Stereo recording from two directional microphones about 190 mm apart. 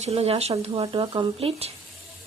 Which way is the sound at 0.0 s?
30° right (ahead or behind).